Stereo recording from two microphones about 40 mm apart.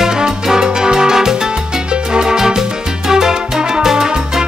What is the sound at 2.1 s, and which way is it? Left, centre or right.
Music, centre.